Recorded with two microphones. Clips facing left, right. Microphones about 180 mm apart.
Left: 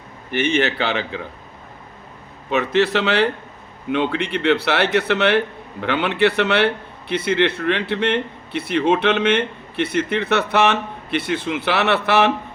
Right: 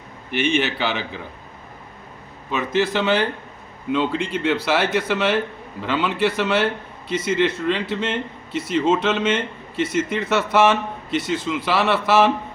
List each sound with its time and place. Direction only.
0.5 s a man's voice: 60° left (ahead or behind)
2.5 s a man's voice: 65° left (ahead or behind)